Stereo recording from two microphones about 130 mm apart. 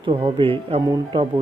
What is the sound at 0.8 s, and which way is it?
Speech, 35° right (ahead or behind).